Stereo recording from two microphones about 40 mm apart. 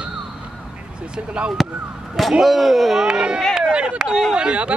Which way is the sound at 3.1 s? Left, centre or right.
Right.